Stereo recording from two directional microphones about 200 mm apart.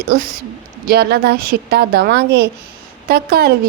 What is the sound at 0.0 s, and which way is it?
A woman's voice, 45° right (ahead or behind).